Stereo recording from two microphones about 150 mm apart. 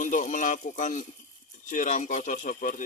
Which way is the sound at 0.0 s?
55° left (ahead or behind).